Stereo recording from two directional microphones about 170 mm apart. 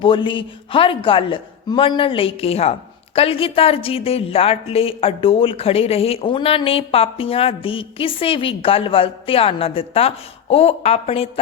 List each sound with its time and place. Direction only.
0.0 s a woman's voice: 30° left (ahead or behind)